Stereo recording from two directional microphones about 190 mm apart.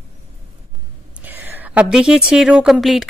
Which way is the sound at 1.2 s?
10° right (ahead or behind).